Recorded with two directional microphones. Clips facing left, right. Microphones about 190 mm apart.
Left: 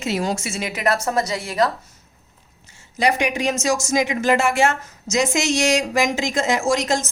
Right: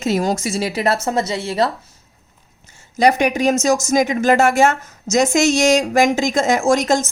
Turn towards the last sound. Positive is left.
turn(degrees=-45)  # may be behind; listen again after turning